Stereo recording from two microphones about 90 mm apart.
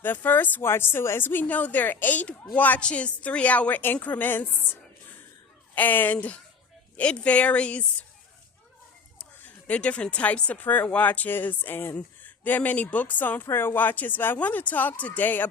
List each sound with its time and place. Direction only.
0.0 s a woman's voice: 20° left (ahead or behind)
5.7 s a woman's voice: 20° left (ahead or behind)
9.6 s speech: 15° left (ahead or behind)